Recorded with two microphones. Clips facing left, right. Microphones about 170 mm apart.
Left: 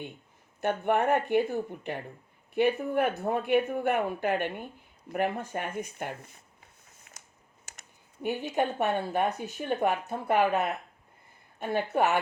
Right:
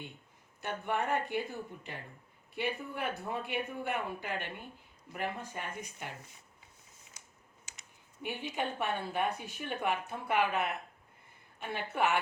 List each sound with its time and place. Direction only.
0.6 s speech: 60° left (ahead or behind)
2.6 s speech: 55° left (ahead or behind)
7.1 s a sound: 65° left (ahead or behind)
7.6 s speech: 45° left (ahead or behind)